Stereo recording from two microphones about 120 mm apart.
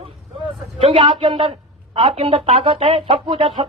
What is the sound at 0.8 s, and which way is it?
A woman's voice, 45° right (ahead or behind).